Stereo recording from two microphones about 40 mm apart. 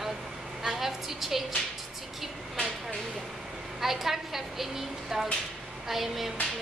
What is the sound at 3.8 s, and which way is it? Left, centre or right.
A woman's voice, centre.